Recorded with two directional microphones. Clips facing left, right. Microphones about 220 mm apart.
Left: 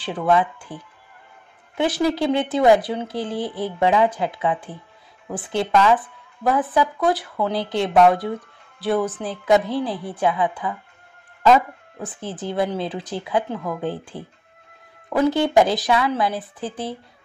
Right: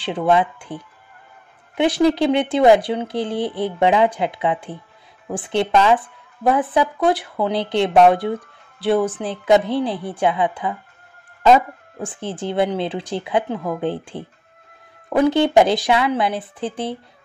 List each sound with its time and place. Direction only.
0.0 s speech: 25° right (ahead or behind)
2.0 s speech: 20° right (ahead or behind)